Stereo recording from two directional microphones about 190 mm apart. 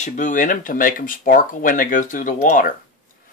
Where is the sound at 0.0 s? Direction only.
45° left (ahead or behind).